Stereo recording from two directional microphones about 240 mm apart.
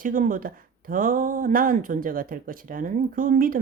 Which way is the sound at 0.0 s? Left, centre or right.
Right.